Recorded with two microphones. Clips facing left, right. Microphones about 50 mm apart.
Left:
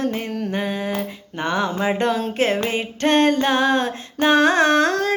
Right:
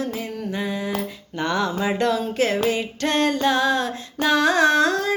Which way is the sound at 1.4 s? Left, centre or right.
Left.